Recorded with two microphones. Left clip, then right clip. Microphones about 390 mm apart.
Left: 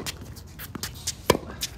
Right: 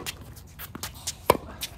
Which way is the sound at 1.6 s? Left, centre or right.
Centre.